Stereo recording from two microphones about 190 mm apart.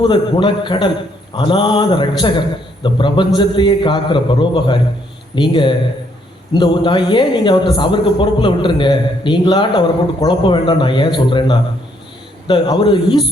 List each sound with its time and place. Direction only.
0.0 s a man's voice: 25° left (ahead or behind)